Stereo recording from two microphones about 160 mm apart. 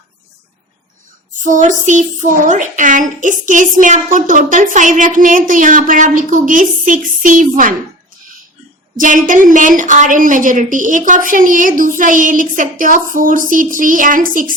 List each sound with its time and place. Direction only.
1.5 s a child's voice: 50° right (ahead or behind)
9.0 s a child's voice: 55° right (ahead or behind)